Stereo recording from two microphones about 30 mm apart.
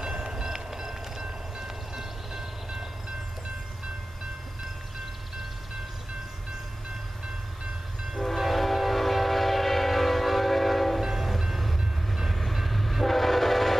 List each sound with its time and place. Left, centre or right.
0.0 s train: right
8.1 s train: centre